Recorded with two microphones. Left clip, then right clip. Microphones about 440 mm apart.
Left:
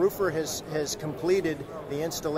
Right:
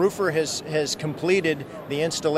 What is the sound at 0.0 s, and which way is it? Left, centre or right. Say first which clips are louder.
A man's voice: right 4 dB; right.